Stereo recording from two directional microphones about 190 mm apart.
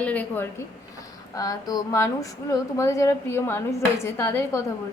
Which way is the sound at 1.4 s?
20° left (ahead or behind).